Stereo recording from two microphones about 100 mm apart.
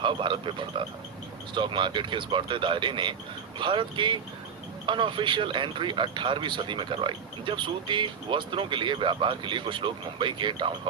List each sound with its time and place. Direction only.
0.0 s speech: 55° right (ahead or behind)